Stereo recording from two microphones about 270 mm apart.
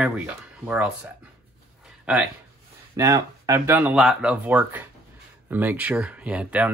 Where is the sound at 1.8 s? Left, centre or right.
Centre.